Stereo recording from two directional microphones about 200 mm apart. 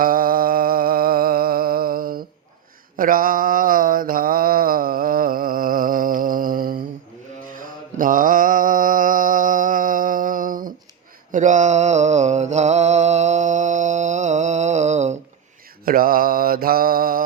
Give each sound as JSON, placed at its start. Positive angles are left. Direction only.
{"t": 0.0, "sound": "music", "side_deg": -45}
{"t": 3.0, "sound": "mantra", "side_deg": -45}
{"t": 15.8, "sound": "mantra", "side_deg": -45}